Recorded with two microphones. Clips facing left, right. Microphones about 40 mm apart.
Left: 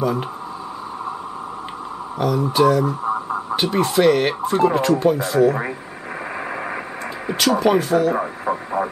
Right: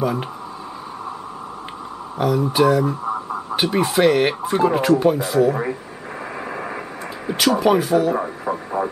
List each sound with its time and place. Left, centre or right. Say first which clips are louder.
0.0 s speech: left 1 dB; centre
2.1 s speech: even; centre
6.5 s radio: left 1 dB; centre
7.3 s speech: even; centre
8.1 s speech: left 1 dB; centre